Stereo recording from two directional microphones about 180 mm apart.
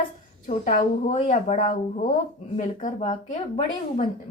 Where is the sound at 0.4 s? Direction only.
45° left (ahead or behind).